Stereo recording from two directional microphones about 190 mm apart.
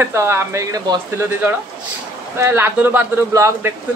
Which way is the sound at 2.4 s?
10° right (ahead or behind).